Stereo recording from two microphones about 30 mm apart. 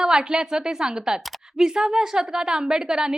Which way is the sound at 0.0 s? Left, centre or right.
Right.